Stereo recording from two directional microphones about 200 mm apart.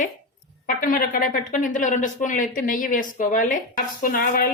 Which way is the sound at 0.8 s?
45° left (ahead or behind).